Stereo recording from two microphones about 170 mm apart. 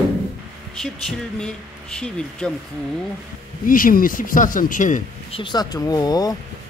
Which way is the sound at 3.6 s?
55° left (ahead or behind).